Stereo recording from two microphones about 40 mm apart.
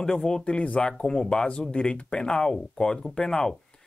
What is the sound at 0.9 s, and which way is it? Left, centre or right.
Speech, left.